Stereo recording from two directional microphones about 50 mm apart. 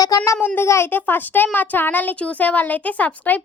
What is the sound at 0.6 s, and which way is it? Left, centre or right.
Child singing, left.